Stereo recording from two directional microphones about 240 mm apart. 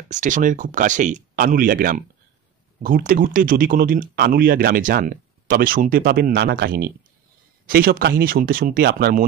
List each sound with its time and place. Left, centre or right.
0.1 s speech: right